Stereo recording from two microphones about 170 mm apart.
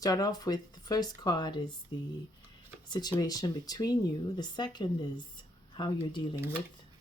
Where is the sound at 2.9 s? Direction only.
25° left (ahead or behind).